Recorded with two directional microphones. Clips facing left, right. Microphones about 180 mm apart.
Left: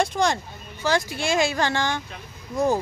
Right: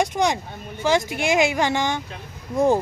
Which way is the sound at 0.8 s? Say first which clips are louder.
Right 3 dB; 20° right (ahead or behind).